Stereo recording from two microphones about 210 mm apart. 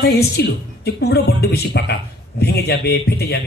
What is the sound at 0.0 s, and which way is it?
A woman's voice, 50° left (ahead or behind).